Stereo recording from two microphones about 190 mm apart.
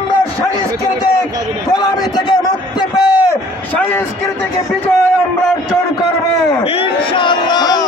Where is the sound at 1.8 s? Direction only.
20° left (ahead or behind).